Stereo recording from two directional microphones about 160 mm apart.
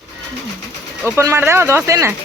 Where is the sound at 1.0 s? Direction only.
15° right (ahead or behind).